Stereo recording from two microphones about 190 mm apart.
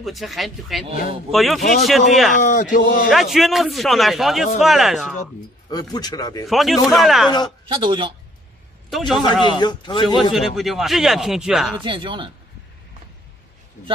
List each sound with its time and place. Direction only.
0.0 s speech: centre (ahead or behind)
2.4 s speech: 40° left (ahead or behind)
3.1 s speech: centre (ahead or behind)
5.7 s speech: 20° left (ahead or behind)
6.4 s speech: centre (ahead or behind)
7.6 s a man's voice: 25° right (ahead or behind)
8.9 s speech: centre (ahead or behind)
9.4 s speech: 25° left (ahead or behind)
10.3 s speech: centre (ahead or behind)
11.8 s a man's voice: 25° right (ahead or behind)